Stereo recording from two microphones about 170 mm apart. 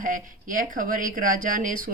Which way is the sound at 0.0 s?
50° right (ahead or behind).